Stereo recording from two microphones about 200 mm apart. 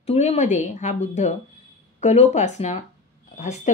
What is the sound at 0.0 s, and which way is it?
Speech, 30° left (ahead or behind).